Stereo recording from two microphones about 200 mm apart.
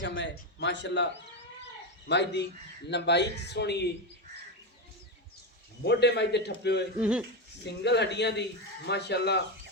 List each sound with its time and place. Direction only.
0.0 s a man's voice: 65° left (ahead or behind)
5.8 s a man's voice: 55° left (ahead or behind)
7.0 s speech: 5° right (ahead or behind)
7.6 s a man's voice: 60° left (ahead or behind)